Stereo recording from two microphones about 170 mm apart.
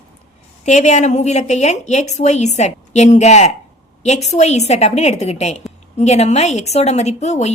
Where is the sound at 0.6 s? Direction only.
45° left (ahead or behind).